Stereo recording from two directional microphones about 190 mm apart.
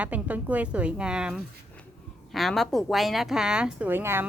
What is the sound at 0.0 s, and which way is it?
A woman's voice, 10° right (ahead or behind).